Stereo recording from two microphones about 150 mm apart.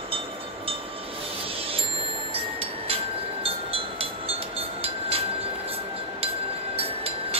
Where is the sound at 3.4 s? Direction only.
40° right (ahead or behind).